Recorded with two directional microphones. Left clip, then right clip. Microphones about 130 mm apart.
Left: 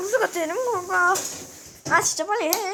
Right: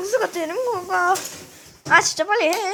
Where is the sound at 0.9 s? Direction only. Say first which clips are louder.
Right 1 dB; 40° right (ahead or behind).